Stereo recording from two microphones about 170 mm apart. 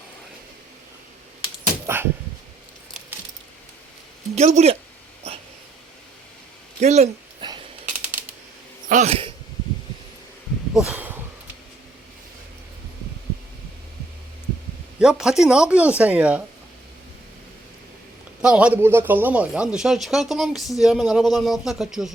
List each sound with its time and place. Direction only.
4.4 s speech: 40° right (ahead or behind)
6.7 s speech: 40° right (ahead or behind)
7.4 s a sound: 25° right (ahead or behind)
8.9 s speech: 40° right (ahead or behind)
10.8 s a sound: 10° right (ahead or behind)
14.9 s speech: 5° right (ahead or behind)
18.4 s speech: 5° right (ahead or behind)